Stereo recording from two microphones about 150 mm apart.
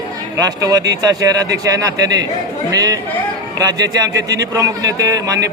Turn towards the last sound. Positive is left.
turn(degrees=-20)  # may be behind; listen again after turning